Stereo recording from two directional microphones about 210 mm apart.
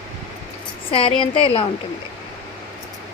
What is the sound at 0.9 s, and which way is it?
Speech, 25° left (ahead or behind).